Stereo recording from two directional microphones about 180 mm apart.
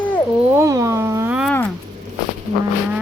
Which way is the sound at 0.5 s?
15° right (ahead or behind).